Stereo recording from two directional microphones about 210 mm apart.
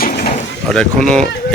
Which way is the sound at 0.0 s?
45° left (ahead or behind).